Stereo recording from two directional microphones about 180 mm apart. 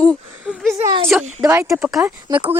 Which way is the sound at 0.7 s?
20° right (ahead or behind).